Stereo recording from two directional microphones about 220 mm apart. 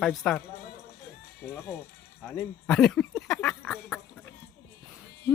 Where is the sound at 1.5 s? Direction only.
10° left (ahead or behind).